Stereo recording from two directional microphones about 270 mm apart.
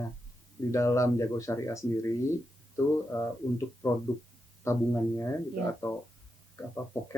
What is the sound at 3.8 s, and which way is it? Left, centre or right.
Speech, centre.